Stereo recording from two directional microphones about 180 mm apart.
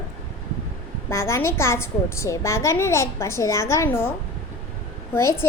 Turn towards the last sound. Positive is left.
turn(degrees=15)  # may be behind; listen again after turning